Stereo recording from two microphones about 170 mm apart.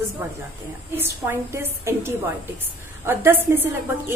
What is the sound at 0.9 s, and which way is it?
A woman's voice, 15° right (ahead or behind).